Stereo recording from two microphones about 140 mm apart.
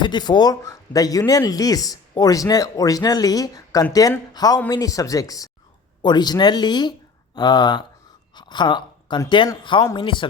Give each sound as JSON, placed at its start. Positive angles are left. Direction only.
{"t": 0.0, "sound": "a woman's voice", "side_deg": 30}